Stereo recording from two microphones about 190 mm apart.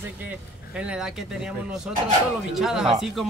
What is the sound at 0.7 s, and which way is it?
Speech, 5° right (ahead or behind).